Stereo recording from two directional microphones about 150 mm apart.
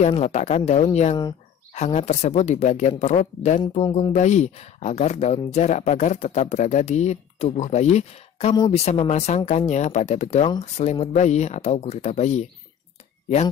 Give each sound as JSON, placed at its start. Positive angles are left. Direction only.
{"t": 0.0, "sound": "speech", "side_deg": 50}